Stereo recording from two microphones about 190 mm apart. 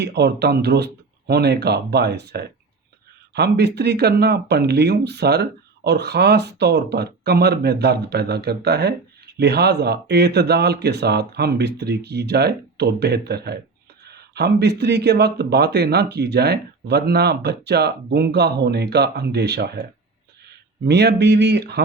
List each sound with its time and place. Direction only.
0.0 s speech: 60° right (ahead or behind)
20.8 s speech: 60° right (ahead or behind)